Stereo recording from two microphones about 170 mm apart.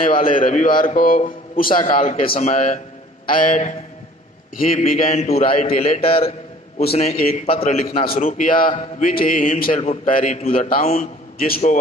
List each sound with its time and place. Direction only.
0.1 s a man's voice: 50° left (ahead or behind)
2.0 s a man's voice: 35° left (ahead or behind)
8.0 s a man's voice: 55° left (ahead or behind)
10.4 s a man's voice: 35° left (ahead or behind)
11.0 s a man's voice: 60° left (ahead or behind)